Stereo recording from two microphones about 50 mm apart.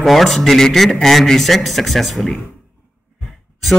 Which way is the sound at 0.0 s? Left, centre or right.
Centre.